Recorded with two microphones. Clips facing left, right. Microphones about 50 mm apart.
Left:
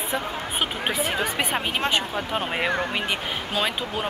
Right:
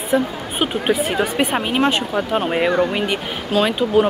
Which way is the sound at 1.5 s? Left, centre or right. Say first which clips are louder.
Right 7 dB; centre.